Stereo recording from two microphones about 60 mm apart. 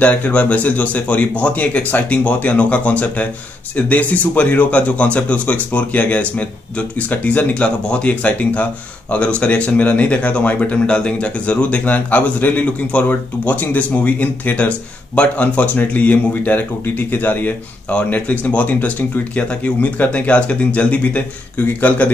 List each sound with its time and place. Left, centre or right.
0.0 s speech: left